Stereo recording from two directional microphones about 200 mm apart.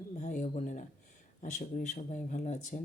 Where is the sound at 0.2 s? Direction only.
35° left (ahead or behind).